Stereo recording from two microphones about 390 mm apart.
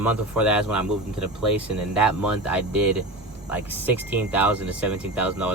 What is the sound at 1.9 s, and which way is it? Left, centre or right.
Speech, centre.